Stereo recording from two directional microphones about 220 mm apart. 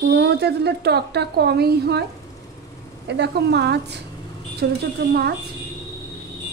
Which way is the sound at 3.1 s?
50° right (ahead or behind).